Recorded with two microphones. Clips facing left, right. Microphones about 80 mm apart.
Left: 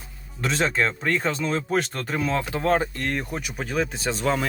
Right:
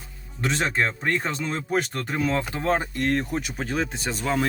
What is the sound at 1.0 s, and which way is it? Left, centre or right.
Speech, centre.